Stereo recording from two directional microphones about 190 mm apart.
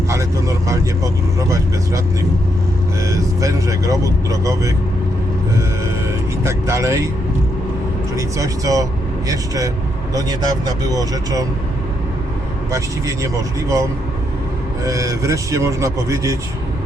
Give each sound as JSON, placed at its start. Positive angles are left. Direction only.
{"t": 0.1, "sound": "speech", "side_deg": -15}
{"t": 3.0, "sound": "speech", "side_deg": -15}
{"t": 6.4, "sound": "speech", "side_deg": -15}
{"t": 8.1, "sound": "speech", "side_deg": -15}
{"t": 10.2, "sound": "speech", "side_deg": -20}
{"t": 12.7, "sound": "speech", "side_deg": -15}
{"t": 14.8, "sound": "speech", "side_deg": -15}